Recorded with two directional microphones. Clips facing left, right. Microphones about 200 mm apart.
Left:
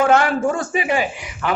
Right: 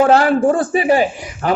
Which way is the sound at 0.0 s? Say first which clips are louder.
Right 4 dB; 35° right (ahead or behind).